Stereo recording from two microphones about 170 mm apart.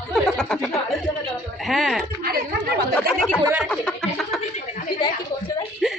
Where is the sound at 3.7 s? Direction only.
5° left (ahead or behind).